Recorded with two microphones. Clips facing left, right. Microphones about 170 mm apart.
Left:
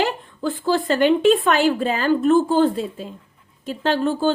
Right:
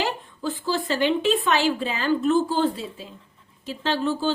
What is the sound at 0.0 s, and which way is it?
A woman's voice, 55° left (ahead or behind).